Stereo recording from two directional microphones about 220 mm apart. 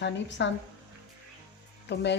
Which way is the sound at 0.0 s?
55° left (ahead or behind).